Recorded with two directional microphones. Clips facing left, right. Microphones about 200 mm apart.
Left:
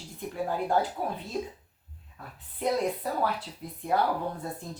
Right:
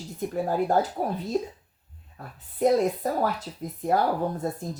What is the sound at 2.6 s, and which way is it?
Speech, 40° right (ahead or behind).